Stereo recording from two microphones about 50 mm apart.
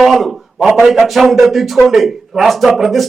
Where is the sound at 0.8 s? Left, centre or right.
Centre.